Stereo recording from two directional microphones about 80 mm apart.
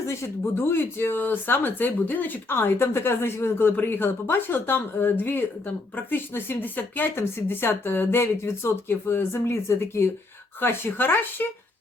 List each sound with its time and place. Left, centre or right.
0.0 s speech: left